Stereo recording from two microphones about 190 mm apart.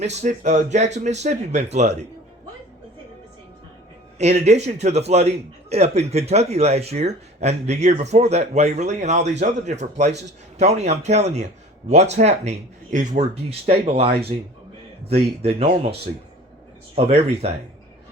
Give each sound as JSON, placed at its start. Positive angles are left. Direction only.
{"t": 0.0, "sound": "a man's voice", "side_deg": -35}
{"t": 4.2, "sound": "a man's voice", "side_deg": -35}
{"t": 16.9, "sound": "a man's voice", "side_deg": -30}